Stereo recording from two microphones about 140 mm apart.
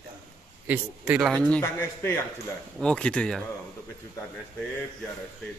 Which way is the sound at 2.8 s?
5° left (ahead or behind).